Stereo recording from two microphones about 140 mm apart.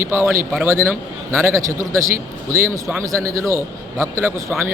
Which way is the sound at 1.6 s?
20° right (ahead or behind).